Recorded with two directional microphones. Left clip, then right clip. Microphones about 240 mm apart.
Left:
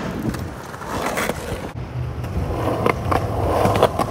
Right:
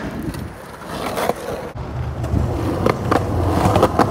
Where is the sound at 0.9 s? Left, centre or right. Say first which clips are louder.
Right 2 dB; centre.